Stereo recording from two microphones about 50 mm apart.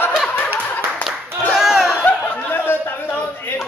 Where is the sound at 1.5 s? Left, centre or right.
Centre.